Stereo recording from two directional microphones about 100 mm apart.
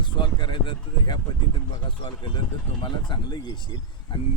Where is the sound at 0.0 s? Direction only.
50° left (ahead or behind).